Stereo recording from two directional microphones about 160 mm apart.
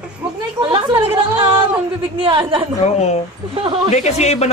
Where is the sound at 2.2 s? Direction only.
35° right (ahead or behind).